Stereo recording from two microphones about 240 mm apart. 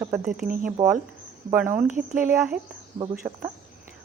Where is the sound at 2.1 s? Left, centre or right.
Centre.